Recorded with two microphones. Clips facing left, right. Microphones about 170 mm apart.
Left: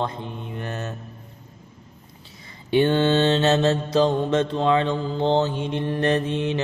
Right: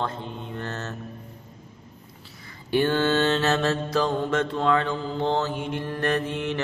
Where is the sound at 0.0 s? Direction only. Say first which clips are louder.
Left 2 dB; 15° left (ahead or behind).